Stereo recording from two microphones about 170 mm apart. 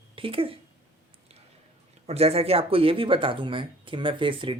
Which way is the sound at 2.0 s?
35° right (ahead or behind).